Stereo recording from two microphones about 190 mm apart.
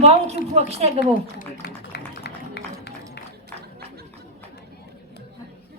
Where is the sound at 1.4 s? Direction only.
60° left (ahead or behind).